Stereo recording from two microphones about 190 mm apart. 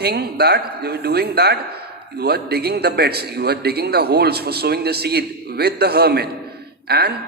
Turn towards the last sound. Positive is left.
turn(degrees=-55)  # may be behind; listen again after turning